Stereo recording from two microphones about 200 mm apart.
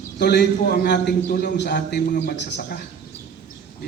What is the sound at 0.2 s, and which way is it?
A man's voice, 55° left (ahead or behind).